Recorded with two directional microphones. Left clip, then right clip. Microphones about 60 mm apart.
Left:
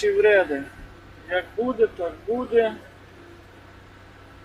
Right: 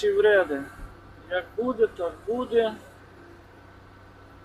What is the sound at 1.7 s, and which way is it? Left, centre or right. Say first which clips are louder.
Speech: left 2 dB; centre.